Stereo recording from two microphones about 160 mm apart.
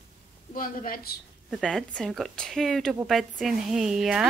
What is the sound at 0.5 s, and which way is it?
Speech, 60° left (ahead or behind).